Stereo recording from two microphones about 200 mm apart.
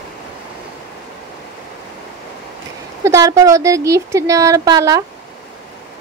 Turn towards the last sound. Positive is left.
turn(degrees=-15)  # may be behind; listen again after turning